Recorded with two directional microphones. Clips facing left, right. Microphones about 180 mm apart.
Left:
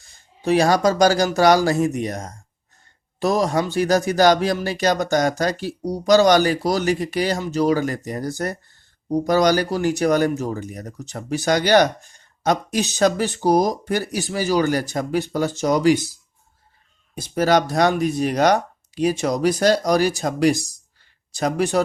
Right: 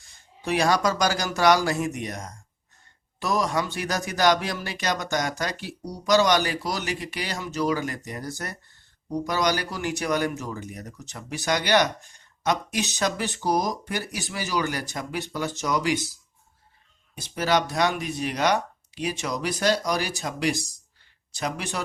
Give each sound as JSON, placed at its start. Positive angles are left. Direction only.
{"t": 0.4, "sound": "speech", "side_deg": 35}
{"t": 17.2, "sound": "speech", "side_deg": 40}